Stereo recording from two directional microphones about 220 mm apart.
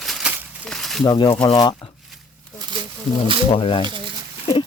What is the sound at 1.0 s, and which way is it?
Speech, 20° left (ahead or behind).